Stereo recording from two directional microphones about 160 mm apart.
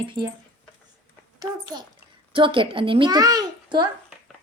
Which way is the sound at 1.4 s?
25° right (ahead or behind).